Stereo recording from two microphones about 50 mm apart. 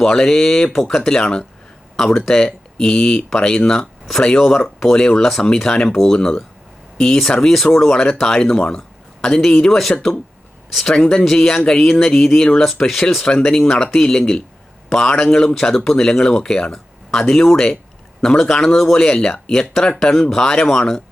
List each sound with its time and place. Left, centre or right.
0.0 s speech: centre
10.7 s speech: centre
10.9 s speech: centre
13.2 s speech: centre